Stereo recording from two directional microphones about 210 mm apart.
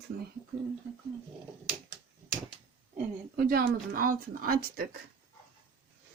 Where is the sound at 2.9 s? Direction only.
45° right (ahead or behind).